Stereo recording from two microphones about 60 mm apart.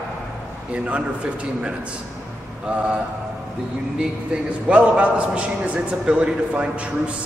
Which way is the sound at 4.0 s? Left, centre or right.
Centre.